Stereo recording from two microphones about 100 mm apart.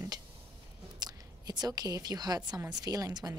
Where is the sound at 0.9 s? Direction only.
45° right (ahead or behind).